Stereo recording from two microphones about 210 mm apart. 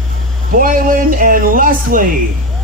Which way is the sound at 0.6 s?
40° right (ahead or behind).